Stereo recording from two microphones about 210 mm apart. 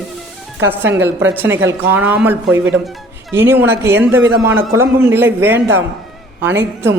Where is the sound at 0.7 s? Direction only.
10° right (ahead or behind).